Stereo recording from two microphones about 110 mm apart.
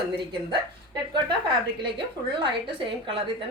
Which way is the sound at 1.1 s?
45° right (ahead or behind).